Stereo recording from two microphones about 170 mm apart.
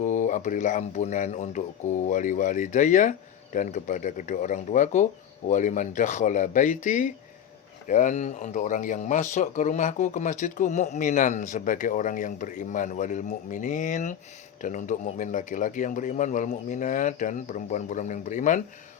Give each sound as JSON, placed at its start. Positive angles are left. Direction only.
{"t": 0.0, "sound": "speech", "side_deg": 45}